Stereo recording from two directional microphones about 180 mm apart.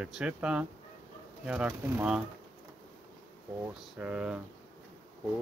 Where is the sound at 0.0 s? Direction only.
5° right (ahead or behind).